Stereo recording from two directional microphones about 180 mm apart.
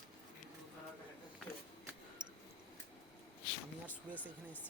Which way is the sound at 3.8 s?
10° left (ahead or behind).